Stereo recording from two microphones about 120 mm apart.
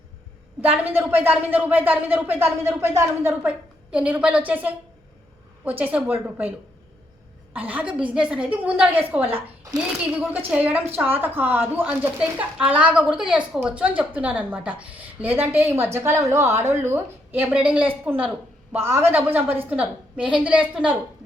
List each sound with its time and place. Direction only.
0.6 s a woman's voice: 15° right (ahead or behind)
3.9 s a woman's voice: 10° right (ahead or behind)
7.5 s a woman's voice: 15° right (ahead or behind)